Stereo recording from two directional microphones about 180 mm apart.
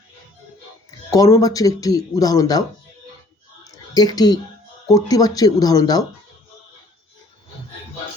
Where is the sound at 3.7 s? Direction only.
20° left (ahead or behind).